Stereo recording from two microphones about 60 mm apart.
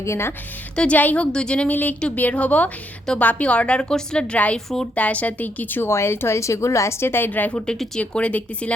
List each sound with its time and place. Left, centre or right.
0.0 s a woman's voice: left
0.8 s a woman's voice: left
1.7 s a woman's voice: left
4.5 s a woman's voice: centre
4.9 s a woman's voice: left
5.9 s a woman's voice: left